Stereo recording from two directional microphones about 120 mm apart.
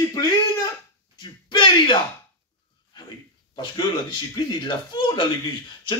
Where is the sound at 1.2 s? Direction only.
40° left (ahead or behind).